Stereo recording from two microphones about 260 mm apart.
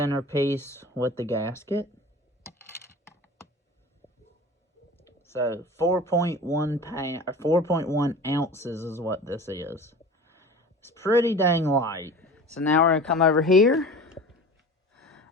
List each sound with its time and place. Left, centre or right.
0.0 s speech: centre
2.5 s coin: centre
4.0 s a sound: left
4.9 s clicking: centre
5.6 s speech: centre
14.9 s gasp: centre